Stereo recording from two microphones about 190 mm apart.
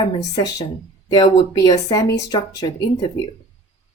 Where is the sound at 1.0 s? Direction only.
20° left (ahead or behind).